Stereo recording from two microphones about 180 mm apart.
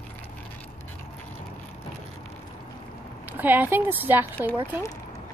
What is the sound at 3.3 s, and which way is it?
Speech, 10° right (ahead or behind).